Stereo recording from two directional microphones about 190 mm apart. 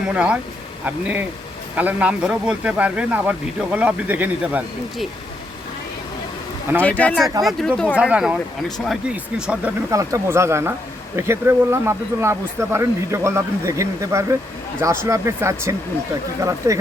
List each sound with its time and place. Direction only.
0.1 s speech: 5° right (ahead or behind)
6.8 s speech: 10° left (ahead or behind)
9.9 s speech: 15° right (ahead or behind)